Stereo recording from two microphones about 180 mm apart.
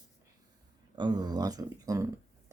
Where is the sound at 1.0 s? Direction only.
25° right (ahead or behind).